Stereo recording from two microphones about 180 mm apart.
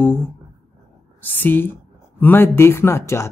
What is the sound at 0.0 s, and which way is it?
Speech, 10° left (ahead or behind).